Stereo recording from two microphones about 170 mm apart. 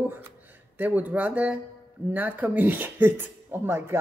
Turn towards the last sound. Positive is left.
turn(degrees=-15)  # may be behind; listen again after turning